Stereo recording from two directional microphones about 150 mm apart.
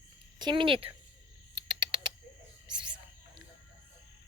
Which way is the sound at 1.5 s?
30° right (ahead or behind).